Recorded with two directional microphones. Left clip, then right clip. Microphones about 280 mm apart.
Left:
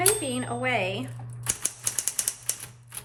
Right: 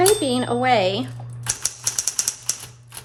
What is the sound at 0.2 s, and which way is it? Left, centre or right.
Speech, right.